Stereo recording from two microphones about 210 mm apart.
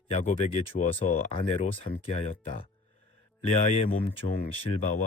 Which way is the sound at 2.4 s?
40° left (ahead or behind).